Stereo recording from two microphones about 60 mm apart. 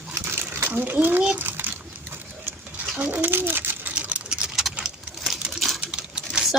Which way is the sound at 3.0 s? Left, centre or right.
Right.